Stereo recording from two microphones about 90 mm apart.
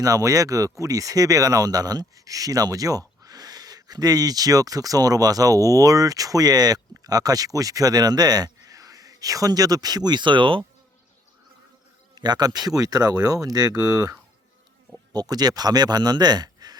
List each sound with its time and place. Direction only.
0.0 s speech: 40° right (ahead or behind); by 10.6 s 65° right (ahead or behind)
12.1 s speech: 50° right (ahead or behind)